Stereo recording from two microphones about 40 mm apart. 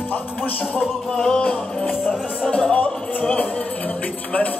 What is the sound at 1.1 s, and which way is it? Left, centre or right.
Music, centre.